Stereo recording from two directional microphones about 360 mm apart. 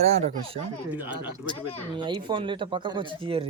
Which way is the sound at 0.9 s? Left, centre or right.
Centre.